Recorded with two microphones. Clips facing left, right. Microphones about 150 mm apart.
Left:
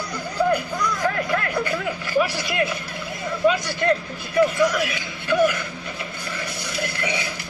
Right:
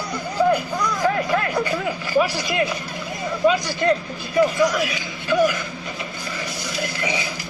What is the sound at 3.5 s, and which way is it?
A man's voice, 15° right (ahead or behind).